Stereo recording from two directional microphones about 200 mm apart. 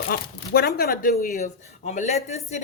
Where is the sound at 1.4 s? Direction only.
35° left (ahead or behind).